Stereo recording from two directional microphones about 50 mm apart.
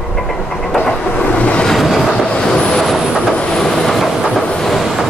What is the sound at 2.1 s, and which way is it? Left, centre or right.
Train, centre.